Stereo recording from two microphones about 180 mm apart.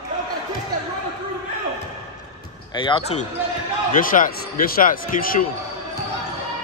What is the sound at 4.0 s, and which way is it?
Speech, 50° left (ahead or behind).